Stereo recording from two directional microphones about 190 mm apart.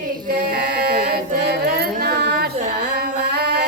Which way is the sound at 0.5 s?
55° right (ahead or behind).